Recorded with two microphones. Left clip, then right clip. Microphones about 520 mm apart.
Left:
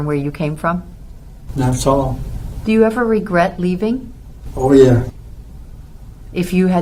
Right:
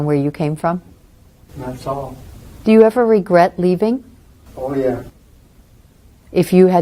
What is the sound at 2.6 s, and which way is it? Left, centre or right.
Speech, right.